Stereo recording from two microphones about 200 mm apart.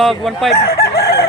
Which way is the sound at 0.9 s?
50° left (ahead or behind).